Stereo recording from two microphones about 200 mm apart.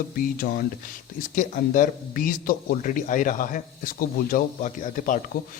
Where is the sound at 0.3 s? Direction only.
45° left (ahead or behind).